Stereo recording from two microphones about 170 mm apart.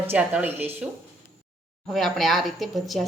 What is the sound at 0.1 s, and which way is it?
Speech, 10° right (ahead or behind).